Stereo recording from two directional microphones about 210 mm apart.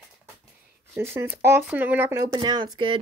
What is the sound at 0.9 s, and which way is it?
Speech, 10° right (ahead or behind).